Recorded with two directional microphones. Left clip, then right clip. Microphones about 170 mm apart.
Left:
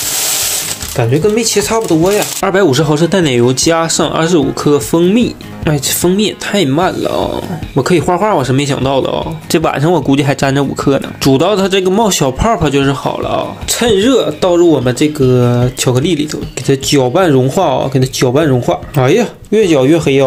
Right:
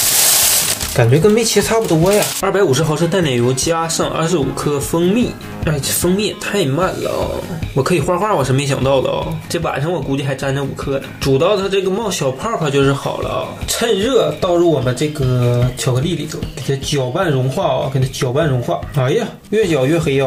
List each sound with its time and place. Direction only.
0.9 s speech: 5° left (ahead or behind)
2.4 s speech: 35° left (ahead or behind)
9.5 s speech: 65° left (ahead or behind)
19.5 s speech: 30° left (ahead or behind)